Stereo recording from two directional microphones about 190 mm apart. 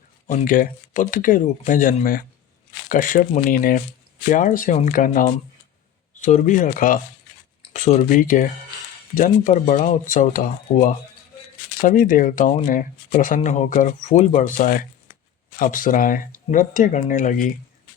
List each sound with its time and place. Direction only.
0.3 s speech: 45° left (ahead or behind)